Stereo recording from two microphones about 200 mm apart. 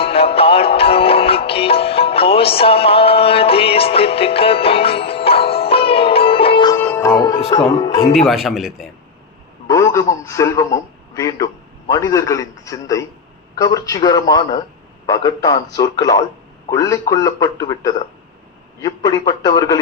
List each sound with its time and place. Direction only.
0.0 s music: 30° left (ahead or behind)
6.7 s music: 10° left (ahead or behind)
7.8 s a man's voice: 20° left (ahead or behind)
8.1 s a man's voice: centre (ahead or behind)
9.6 s a man's voice: 15° left (ahead or behind)